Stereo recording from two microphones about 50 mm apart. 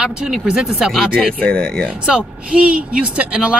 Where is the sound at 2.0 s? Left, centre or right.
Right.